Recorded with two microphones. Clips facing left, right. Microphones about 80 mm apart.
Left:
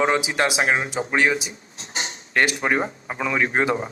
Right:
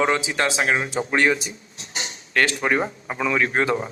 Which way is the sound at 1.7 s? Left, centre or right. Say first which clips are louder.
Left 4 dB; left.